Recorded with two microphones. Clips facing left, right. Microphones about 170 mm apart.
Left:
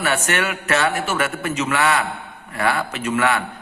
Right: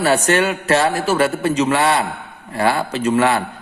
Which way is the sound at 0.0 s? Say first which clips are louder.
Right 6 dB; 35° right (ahead or behind).